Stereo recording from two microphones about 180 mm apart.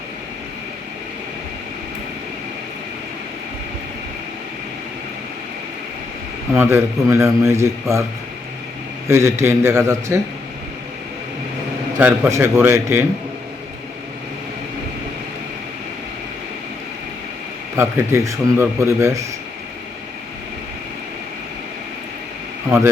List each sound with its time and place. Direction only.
6.5 s a man's voice: 10° right (ahead or behind)
9.0 s a man's voice: 15° right (ahead or behind)
11.9 s a man's voice: 10° right (ahead or behind)
17.7 s a man's voice: 15° right (ahead or behind)